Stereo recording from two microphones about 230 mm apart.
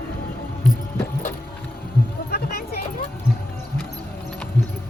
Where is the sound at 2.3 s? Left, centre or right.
Left.